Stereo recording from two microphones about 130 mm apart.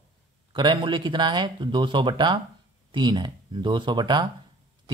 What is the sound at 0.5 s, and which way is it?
Speech, 40° right (ahead or behind).